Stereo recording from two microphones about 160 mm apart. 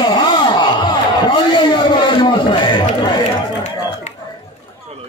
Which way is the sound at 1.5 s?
30° left (ahead or behind).